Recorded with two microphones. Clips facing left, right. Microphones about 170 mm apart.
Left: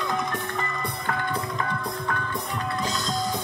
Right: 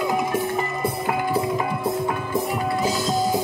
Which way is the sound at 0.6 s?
20° right (ahead or behind).